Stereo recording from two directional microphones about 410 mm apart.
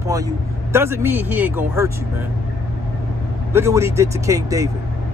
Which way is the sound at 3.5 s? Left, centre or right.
Centre.